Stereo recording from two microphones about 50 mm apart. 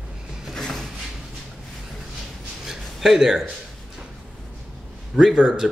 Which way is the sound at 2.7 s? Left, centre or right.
Centre.